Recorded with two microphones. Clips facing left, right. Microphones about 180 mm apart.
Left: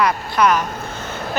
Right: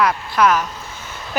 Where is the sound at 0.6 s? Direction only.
55° left (ahead or behind).